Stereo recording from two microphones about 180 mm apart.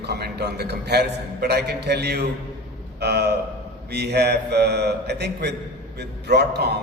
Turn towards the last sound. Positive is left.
turn(degrees=-65)  # may be behind; listen again after turning